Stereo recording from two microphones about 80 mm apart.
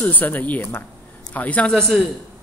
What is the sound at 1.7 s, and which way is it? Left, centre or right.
Speech, centre.